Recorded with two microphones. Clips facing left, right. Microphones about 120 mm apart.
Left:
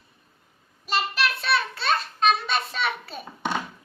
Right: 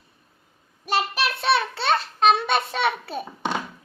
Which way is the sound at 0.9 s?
70° right (ahead or behind).